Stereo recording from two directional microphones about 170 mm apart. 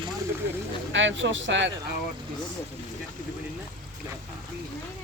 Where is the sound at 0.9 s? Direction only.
90° right.